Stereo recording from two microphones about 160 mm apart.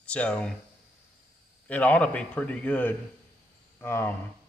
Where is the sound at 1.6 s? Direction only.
10° left (ahead or behind).